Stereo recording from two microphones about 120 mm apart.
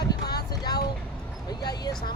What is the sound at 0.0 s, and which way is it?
Boat, 35° left (ahead or behind).